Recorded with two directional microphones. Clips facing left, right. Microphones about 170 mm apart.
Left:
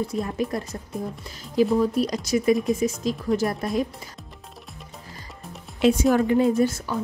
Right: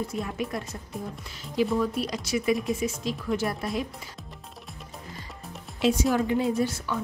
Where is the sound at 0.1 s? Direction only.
35° left (ahead or behind).